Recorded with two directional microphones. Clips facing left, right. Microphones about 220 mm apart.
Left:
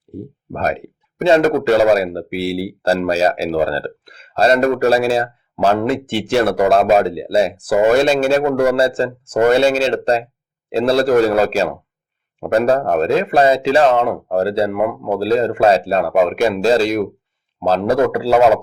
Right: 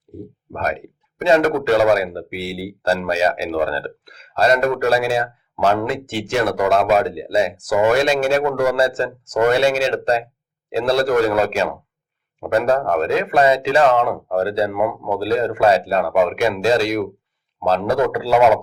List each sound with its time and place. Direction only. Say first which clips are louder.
0.1 s speech: left 4 dB; 30° left (ahead or behind)